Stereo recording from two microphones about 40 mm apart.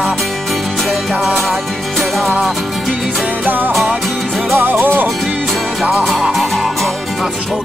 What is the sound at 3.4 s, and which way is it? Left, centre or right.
Music, right.